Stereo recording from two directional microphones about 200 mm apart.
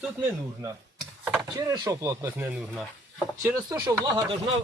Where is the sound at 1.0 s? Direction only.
10° right (ahead or behind).